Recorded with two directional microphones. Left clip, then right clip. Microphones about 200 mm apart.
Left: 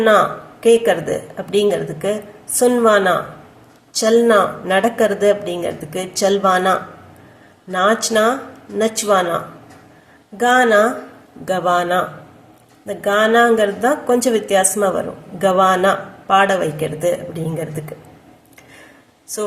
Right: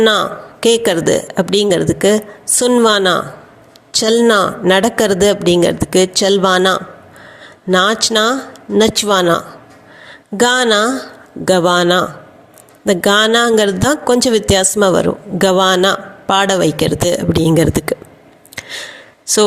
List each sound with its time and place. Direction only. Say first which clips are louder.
0.6 s a woman's voice: right 1 dB; 45° right (ahead or behind)